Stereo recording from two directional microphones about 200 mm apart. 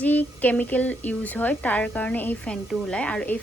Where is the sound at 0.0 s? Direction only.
10° left (ahead or behind).